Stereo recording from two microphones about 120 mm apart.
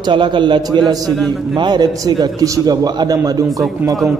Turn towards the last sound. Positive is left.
turn(degrees=-30)  # may be behind; listen again after turning